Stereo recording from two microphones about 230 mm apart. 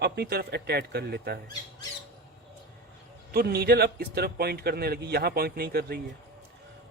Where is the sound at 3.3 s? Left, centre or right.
Right.